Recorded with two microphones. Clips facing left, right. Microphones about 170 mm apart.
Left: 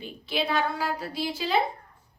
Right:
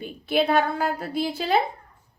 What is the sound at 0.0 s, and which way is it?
A woman's voice, 55° right (ahead or behind).